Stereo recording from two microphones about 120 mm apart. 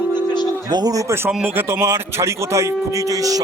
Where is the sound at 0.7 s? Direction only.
35° right (ahead or behind).